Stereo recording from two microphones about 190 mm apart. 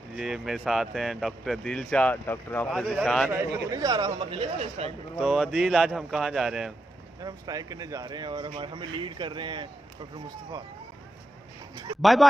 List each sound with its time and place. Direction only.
0.1 s speech: centre (ahead or behind)
3.7 s speech: 20° right (ahead or behind)
5.2 s speech: 5° right (ahead or behind)
7.2 s speech: 20° right (ahead or behind)
11.7 s a sound: 20° right (ahead or behind)
12.0 s speech: centre (ahead or behind)